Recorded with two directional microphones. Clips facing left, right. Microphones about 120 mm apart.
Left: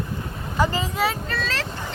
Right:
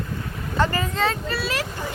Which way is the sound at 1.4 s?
10° right (ahead or behind).